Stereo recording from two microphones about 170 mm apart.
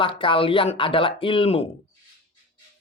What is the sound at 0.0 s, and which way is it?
Speech, 30° left (ahead or behind).